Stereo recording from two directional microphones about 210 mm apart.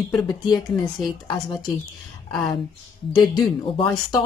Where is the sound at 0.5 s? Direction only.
20° left (ahead or behind).